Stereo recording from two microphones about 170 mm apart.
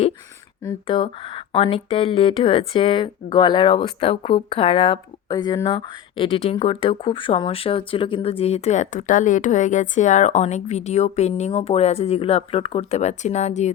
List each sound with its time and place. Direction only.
0.9 s speech: 30° left (ahead or behind)